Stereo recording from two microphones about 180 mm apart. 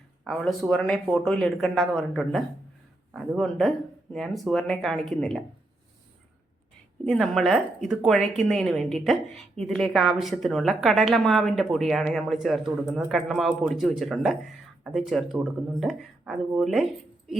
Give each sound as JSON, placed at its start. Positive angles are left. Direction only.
{"t": 0.3, "sound": "a woman's voice", "side_deg": 0}
{"t": 7.0, "sound": "a woman's voice", "side_deg": 0}